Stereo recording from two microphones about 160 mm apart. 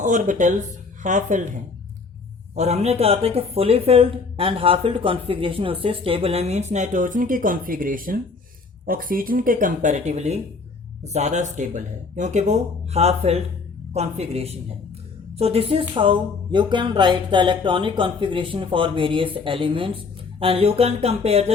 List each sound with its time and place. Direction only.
0.0 s speech: 50° right (ahead or behind)
2.6 s speech: 45° right (ahead or behind)